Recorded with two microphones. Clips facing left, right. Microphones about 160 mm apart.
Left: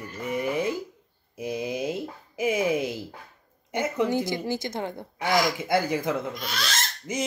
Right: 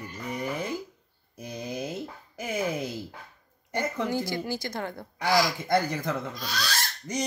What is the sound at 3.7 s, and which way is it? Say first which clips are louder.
A woman's voice: left 4 dB; 20° left (ahead or behind).